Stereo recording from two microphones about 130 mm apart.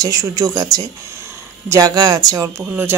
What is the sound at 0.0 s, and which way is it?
Speech, 25° right (ahead or behind).